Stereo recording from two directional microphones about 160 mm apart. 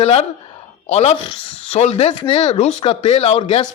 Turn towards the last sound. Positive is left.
turn(degrees=40)  # may be behind; listen again after turning